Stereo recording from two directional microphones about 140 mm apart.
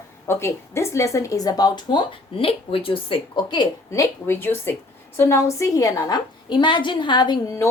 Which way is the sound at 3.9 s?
20° left (ahead or behind).